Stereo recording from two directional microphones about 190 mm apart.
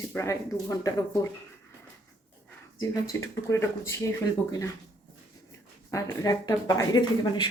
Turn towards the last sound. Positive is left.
turn(degrees=25)  # may be behind; listen again after turning